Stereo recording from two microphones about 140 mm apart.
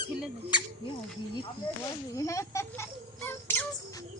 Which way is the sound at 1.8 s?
25° left (ahead or behind).